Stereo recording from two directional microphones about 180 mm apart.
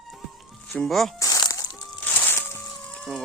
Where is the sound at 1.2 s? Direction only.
20° left (ahead or behind).